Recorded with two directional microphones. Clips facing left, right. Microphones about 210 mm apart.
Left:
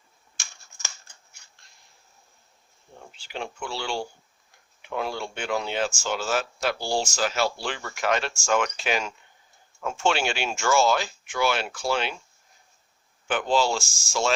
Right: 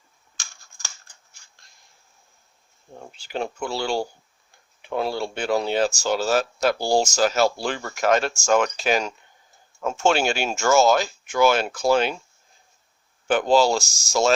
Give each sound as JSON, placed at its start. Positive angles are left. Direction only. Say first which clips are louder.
{"t": 3.2, "sound": "speech", "louder": "right 6 dB", "side_deg": -40}
{"t": 13.2, "sound": "speech", "louder": "right 5 dB", "side_deg": -40}